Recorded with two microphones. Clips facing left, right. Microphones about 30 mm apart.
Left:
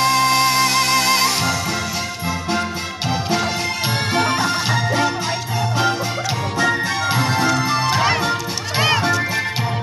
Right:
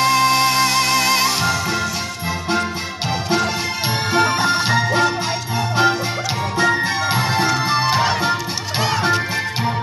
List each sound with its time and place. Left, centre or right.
0.0 s music: centre
4.2 s music: right
6.6 s music: right
7.1 s music: centre